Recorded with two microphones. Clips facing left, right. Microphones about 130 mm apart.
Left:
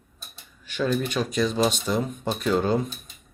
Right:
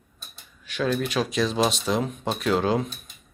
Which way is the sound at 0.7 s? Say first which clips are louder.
Even; centre (ahead or behind).